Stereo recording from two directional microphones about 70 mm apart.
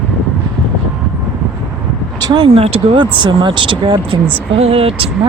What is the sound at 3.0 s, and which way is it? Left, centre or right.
Speech, right.